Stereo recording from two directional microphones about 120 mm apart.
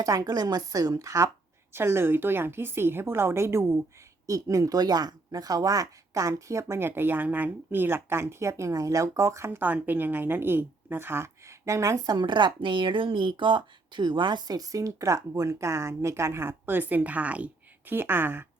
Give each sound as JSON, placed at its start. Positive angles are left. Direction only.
{"t": 0.0, "sound": "speech", "side_deg": -30}